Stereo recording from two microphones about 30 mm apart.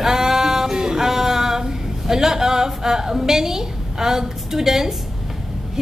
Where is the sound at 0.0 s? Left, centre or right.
Centre.